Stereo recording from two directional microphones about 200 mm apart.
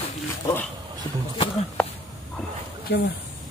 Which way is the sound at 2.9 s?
55° left (ahead or behind).